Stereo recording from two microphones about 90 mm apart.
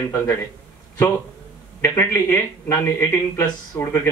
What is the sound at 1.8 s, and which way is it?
Speech, 30° left (ahead or behind).